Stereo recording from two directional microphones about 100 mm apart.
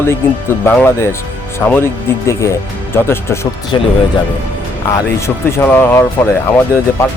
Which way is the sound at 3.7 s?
50° left (ahead or behind).